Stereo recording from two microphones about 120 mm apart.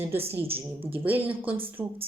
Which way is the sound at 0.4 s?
50° right (ahead or behind).